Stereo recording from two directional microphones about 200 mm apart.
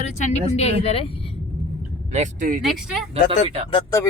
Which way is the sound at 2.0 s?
35° right (ahead or behind).